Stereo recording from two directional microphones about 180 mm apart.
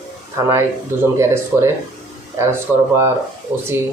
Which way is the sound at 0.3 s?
15° right (ahead or behind).